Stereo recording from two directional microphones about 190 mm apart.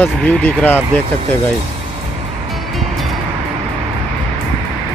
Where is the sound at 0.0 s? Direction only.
10° left (ahead or behind).